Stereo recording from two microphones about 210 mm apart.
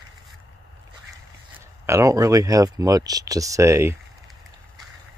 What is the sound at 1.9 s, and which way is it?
Speech, 15° right (ahead or behind).